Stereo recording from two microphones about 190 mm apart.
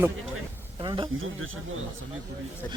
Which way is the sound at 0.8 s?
25° right (ahead or behind).